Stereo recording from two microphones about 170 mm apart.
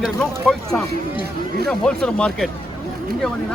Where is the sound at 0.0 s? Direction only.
Centre (ahead or behind).